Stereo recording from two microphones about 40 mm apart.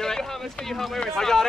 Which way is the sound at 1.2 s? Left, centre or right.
Centre.